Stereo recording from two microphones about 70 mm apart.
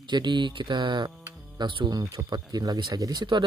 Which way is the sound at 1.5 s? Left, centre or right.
Right.